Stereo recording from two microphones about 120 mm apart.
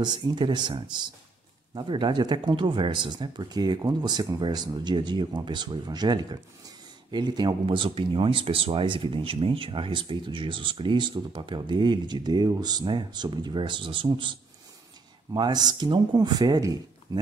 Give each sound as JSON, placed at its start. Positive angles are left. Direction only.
{"t": 0.0, "sound": "speech", "side_deg": -35}